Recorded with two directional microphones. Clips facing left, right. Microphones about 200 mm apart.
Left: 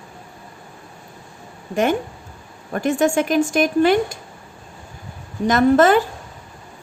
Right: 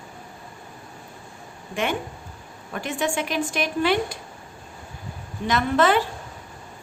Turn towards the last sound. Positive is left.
turn(degrees=45)  # may be behind; listen again after turning